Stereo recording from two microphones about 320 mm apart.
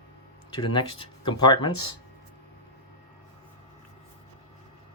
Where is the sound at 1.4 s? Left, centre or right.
Centre.